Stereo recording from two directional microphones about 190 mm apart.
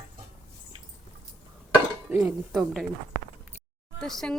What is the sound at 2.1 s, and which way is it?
Speech, 10° right (ahead or behind).